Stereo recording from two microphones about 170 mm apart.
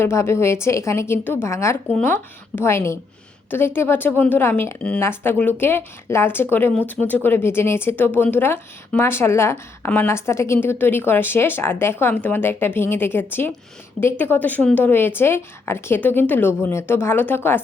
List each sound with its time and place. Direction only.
0.0 s speech: 15° left (ahead or behind)
1.9 s speech: 5° left (ahead or behind)